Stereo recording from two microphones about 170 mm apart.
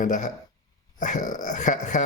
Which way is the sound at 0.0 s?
45° left (ahead or behind).